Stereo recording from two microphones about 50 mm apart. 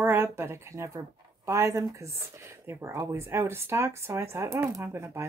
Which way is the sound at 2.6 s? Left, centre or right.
Right.